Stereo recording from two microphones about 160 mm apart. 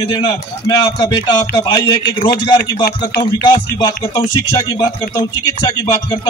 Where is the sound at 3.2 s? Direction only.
30° left (ahead or behind).